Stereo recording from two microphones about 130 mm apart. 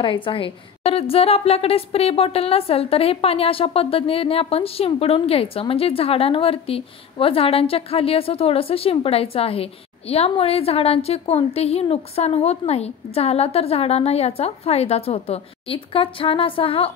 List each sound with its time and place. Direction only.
0.0 s a woman's voice: 40° left (ahead or behind)